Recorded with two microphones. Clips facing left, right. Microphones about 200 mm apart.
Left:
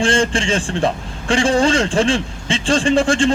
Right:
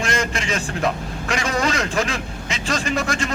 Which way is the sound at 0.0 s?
30° left (ahead or behind).